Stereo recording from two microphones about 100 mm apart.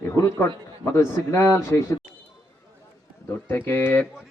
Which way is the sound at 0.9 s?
25° left (ahead or behind).